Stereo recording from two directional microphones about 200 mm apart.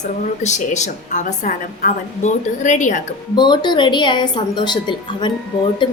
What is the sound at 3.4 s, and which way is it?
A woman's voice, 20° left (ahead or behind).